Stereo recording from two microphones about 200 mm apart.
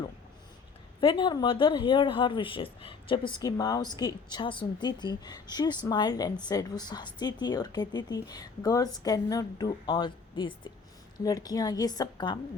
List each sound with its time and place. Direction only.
1.0 s speech: 25° left (ahead or behind)